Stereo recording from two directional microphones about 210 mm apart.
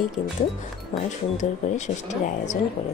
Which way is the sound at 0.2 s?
35° left (ahead or behind).